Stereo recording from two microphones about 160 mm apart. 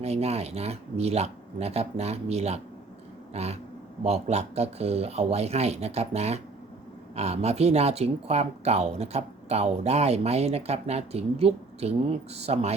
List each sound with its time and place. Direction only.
0.0 s speech: 40° right (ahead or behind)